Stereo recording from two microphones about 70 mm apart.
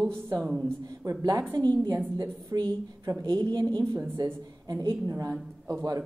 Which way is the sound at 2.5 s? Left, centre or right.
Right.